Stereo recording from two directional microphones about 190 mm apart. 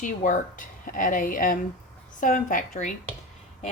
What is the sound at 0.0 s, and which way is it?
A woman's voice, 45° left (ahead or behind).